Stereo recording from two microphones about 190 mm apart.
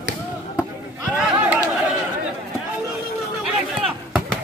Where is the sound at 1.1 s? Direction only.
10° right (ahead or behind).